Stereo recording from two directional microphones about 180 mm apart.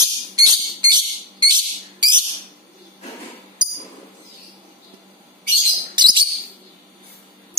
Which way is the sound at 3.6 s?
25° right (ahead or behind).